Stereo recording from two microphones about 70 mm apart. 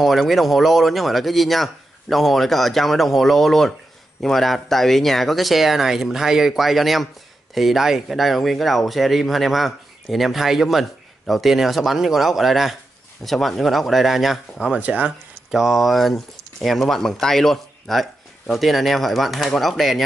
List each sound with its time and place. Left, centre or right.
0.0 s speech: centre
14.7 s speech: centre
15.5 s speech: centre